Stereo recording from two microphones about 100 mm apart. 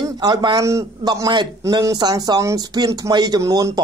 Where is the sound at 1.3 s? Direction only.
45° right (ahead or behind).